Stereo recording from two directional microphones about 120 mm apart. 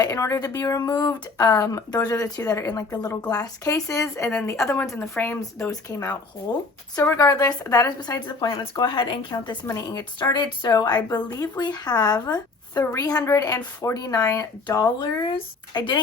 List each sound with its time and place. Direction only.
0.0 s speech: 25° left (ahead or behind)
6.9 s a woman's voice: 25° left (ahead or behind); by 16.0 s 40° left (ahead or behind)